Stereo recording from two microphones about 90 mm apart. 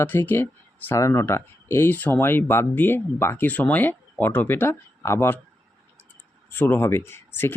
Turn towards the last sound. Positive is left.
turn(degrees=25)  # may be behind; listen again after turning